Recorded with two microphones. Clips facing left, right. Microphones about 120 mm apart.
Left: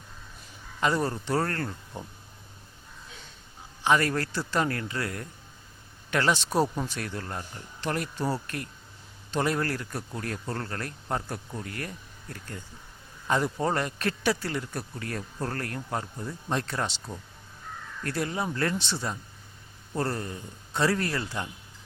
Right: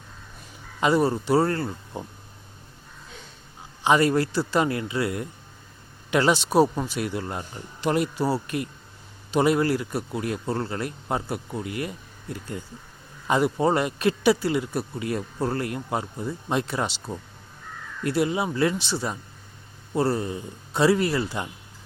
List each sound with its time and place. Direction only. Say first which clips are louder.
0.8 s speech: right 6 dB; 15° right (ahead or behind)
3.8 s speech: right 5 dB; 15° right (ahead or behind)
18.0 s speech: right 6 dB; 15° right (ahead or behind)
18.9 s speech: right 4 dB; 20° right (ahead or behind)